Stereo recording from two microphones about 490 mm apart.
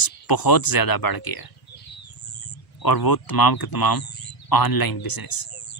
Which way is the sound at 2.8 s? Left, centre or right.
Left.